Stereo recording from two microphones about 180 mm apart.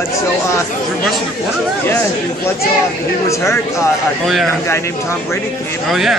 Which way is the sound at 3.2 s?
15° left (ahead or behind).